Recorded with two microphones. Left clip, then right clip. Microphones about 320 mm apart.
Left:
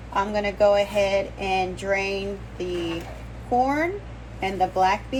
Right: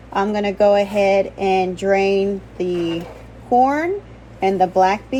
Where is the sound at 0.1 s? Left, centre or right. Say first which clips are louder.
Right 4 dB; right.